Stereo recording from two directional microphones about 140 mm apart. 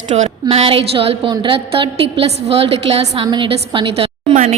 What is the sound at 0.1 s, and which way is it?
A woman's voice, 50° right (ahead or behind).